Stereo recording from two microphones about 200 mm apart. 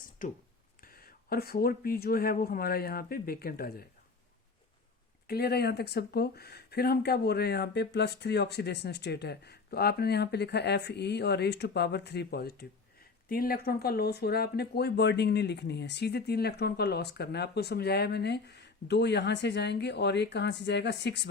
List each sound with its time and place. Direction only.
0.2 s speech: 40° left (ahead or behind)
5.3 s speech: 50° left (ahead or behind)